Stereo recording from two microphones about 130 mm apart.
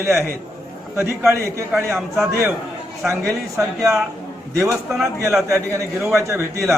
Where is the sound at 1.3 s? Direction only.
20° right (ahead or behind).